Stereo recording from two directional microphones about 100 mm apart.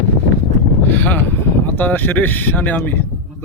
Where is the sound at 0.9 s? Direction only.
20° left (ahead or behind).